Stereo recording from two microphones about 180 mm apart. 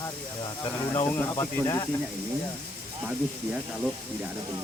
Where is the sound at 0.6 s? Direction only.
25° left (ahead or behind).